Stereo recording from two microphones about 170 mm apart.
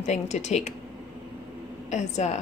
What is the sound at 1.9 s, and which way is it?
Speech, 45° left (ahead or behind).